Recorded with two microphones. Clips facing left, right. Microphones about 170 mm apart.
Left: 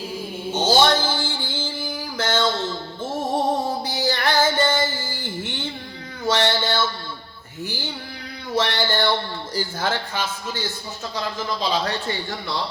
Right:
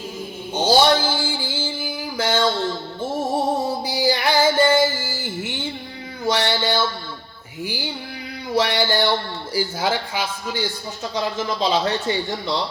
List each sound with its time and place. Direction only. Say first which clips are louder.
0.5 s a sound: right 2 dB; 10° right (ahead or behind)
3.0 s music: right 1 dB; 10° right (ahead or behind)
6.2 s a man's voice: even; 10° right (ahead or behind)
11.9 s speech: right 4 dB; 20° right (ahead or behind)